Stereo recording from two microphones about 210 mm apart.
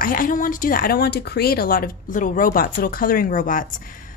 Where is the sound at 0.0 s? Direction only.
40° left (ahead or behind).